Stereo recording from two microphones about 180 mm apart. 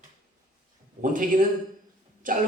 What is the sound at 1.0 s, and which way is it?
A man's voice, 45° right (ahead or behind).